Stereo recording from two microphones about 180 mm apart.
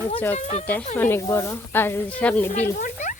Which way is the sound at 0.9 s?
10° left (ahead or behind).